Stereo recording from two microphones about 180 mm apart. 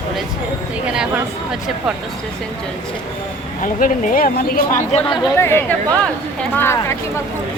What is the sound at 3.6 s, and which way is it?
Speech, 45° left (ahead or behind).